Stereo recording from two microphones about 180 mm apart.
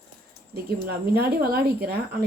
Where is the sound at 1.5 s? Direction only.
60° right (ahead or behind).